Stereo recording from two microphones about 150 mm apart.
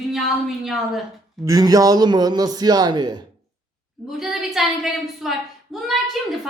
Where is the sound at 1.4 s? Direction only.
25° right (ahead or behind).